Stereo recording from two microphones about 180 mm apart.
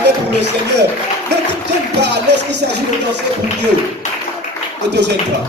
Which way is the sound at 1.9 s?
70° right (ahead or behind).